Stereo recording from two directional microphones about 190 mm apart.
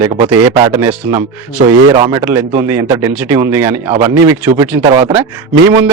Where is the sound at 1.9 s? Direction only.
25° right (ahead or behind).